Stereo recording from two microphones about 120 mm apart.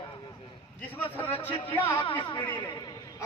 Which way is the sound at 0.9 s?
15° left (ahead or behind).